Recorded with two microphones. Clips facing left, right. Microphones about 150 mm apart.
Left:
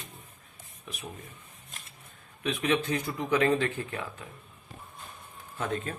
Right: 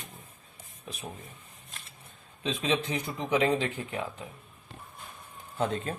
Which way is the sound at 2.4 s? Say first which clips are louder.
Left 1 dB; 25° right (ahead or behind).